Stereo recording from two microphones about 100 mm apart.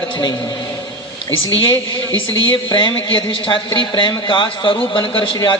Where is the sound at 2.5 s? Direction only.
55° left (ahead or behind).